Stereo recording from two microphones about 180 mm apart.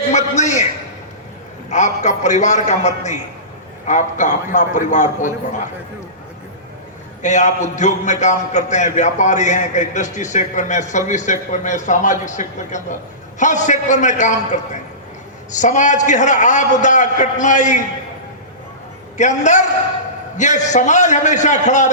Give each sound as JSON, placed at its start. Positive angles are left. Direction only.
{"t": 0.1, "sound": "a sound", "side_deg": 40}
{"t": 1.7, "sound": "a man's voice", "side_deg": 40}
{"t": 7.2, "sound": "a man's voice", "side_deg": 40}
{"t": 19.1, "sound": "a man's voice", "side_deg": 40}